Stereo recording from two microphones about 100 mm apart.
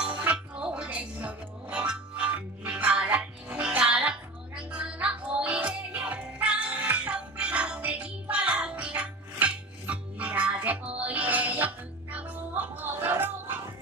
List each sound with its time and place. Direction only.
0.2 s music: 10° right (ahead or behind)